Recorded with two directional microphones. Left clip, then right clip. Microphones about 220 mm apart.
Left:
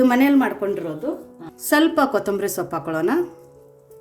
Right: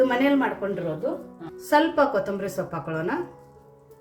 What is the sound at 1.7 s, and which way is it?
A woman's voice, 55° left (ahead or behind).